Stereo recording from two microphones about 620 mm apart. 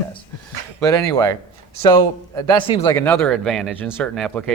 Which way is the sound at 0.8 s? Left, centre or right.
Centre.